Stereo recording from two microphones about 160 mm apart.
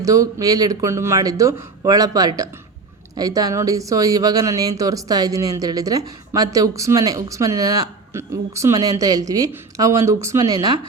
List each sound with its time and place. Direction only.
0.0 s speech: 20° right (ahead or behind)